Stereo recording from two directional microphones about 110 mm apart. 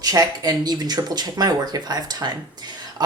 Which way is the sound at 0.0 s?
35° right (ahead or behind).